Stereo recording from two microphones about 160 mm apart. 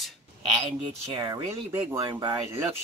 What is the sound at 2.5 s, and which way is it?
Speech, 15° right (ahead or behind).